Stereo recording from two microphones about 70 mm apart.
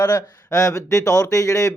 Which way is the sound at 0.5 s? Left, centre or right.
Left.